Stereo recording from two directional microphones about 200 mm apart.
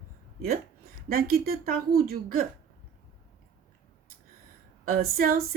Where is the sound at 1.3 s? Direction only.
50° right (ahead or behind).